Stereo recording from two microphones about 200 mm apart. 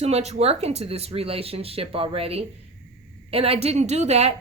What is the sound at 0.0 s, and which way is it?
Speech, 30° right (ahead or behind).